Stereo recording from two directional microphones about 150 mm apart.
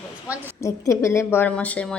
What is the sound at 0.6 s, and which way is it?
A woman's voice, 20° left (ahead or behind).